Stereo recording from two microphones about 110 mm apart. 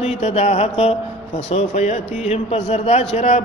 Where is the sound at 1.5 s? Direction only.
80° left.